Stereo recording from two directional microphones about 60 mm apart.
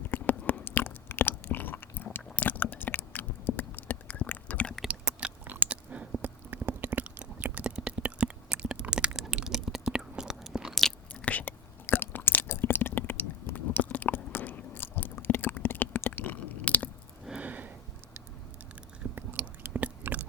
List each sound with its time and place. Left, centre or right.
0.0 s biting: left
2.3 s chewing: left
5.1 s chewing: centre
5.5 s biting: right
7.6 s a sound: centre
9.1 s chewing: centre
10.4 s biting: centre
11.1 s whispering: left
17.4 s a sound: right
19.1 s chewing: right